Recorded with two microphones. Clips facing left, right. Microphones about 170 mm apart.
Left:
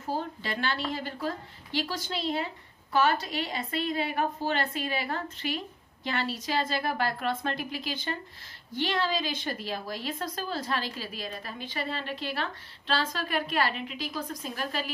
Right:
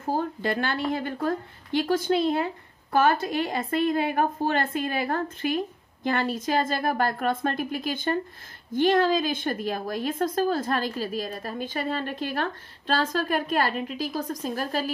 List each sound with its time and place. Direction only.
0.0 s a woman's voice: 50° right (ahead or behind)